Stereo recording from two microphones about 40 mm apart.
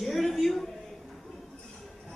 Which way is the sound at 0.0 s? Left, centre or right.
Centre.